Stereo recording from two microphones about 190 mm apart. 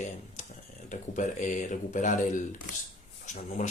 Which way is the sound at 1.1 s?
40° left (ahead or behind).